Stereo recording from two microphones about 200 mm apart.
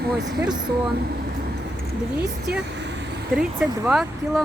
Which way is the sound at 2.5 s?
60° right (ahead or behind).